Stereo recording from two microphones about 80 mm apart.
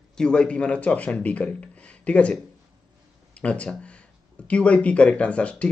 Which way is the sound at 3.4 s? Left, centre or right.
Centre.